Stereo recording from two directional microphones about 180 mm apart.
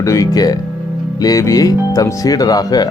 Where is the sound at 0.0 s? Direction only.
15° left (ahead or behind).